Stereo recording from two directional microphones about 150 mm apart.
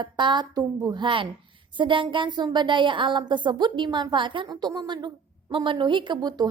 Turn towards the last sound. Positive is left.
turn(degrees=-30)  # may be behind; listen again after turning